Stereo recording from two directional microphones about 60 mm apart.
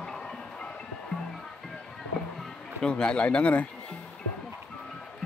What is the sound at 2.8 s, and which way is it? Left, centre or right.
Speech, centre.